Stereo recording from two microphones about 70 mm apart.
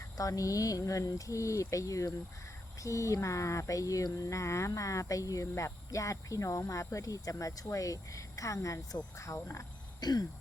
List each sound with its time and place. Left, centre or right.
0.2 s speech: left
10.0 s throat clearing: left